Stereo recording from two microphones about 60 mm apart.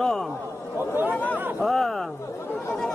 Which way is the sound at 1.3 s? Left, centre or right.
Right.